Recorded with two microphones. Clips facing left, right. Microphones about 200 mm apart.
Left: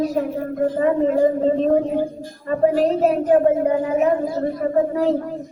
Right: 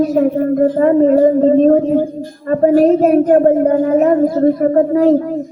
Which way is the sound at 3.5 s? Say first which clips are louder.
Right 6 dB; 45° right (ahead or behind).